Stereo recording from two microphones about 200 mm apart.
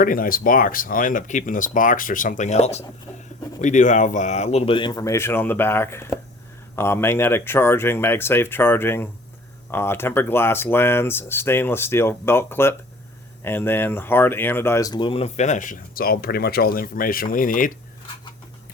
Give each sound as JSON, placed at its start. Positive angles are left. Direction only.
{"t": 0.0, "sound": "speech", "side_deg": 45}
{"t": 3.1, "sound": "speech", "side_deg": 10}
{"t": 3.6, "sound": "speech", "side_deg": 40}